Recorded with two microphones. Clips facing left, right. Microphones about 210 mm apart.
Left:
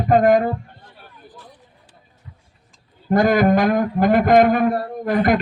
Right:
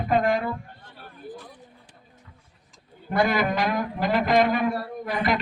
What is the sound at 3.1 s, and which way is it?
A man's voice, 45° left (ahead or behind).